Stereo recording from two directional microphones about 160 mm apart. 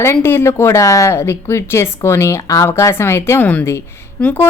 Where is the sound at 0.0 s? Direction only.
15° left (ahead or behind).